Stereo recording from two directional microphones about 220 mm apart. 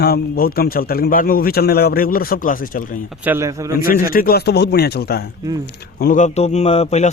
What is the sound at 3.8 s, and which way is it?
A man's voice, 40° left (ahead or behind).